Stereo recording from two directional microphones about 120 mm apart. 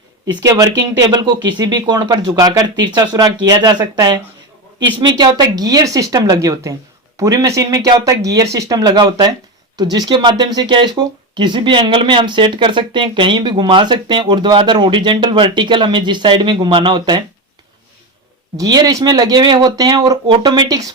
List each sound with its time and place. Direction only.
0.3 s speech: 30° right (ahead or behind)
18.5 s speech: 30° right (ahead or behind)